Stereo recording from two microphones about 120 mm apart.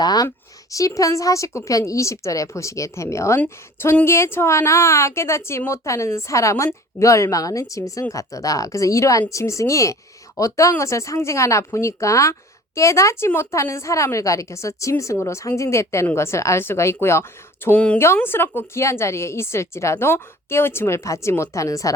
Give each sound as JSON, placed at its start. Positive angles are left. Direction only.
{"t": 0.0, "sound": "speech", "side_deg": 30}